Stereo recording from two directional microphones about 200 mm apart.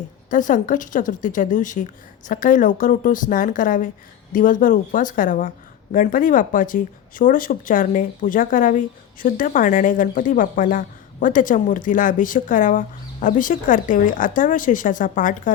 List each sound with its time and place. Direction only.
0.3 s speech: 40° left (ahead or behind)